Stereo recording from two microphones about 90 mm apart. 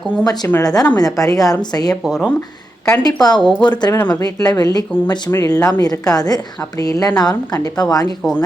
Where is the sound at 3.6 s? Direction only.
50° left (ahead or behind).